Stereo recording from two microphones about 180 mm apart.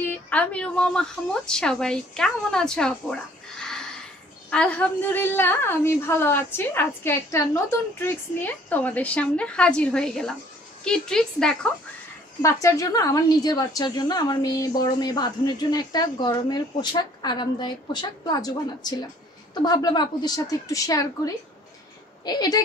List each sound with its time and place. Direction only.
0.0 s a woman's voice: 10° left (ahead or behind)
12.4 s a woman's voice: 15° left (ahead or behind)
22.2 s a woman's voice: 20° left (ahead or behind)